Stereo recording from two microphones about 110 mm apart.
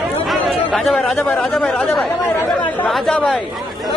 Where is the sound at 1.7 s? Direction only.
15° left (ahead or behind).